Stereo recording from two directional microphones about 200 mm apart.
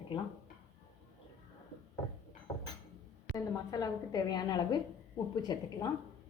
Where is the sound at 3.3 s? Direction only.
15° left (ahead or behind).